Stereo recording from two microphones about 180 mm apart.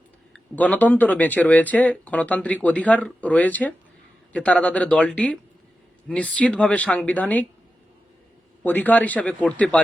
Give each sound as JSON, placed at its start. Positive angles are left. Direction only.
{"t": 0.3, "sound": "speech", "side_deg": 10}
{"t": 8.6, "sound": "speech", "side_deg": 10}